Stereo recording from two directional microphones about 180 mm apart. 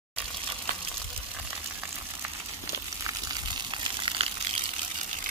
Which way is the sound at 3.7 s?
30° right (ahead or behind).